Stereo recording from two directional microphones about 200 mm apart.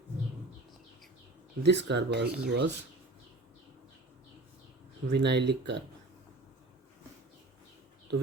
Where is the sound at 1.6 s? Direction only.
60° right (ahead or behind).